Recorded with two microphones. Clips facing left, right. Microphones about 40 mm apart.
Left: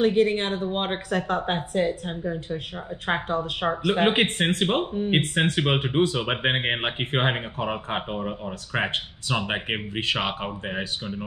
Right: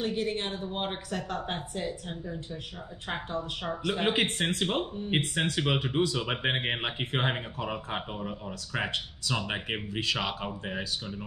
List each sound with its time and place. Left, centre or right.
0.0 s speech: left